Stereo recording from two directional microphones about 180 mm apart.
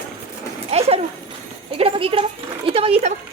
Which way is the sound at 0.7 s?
35° right (ahead or behind).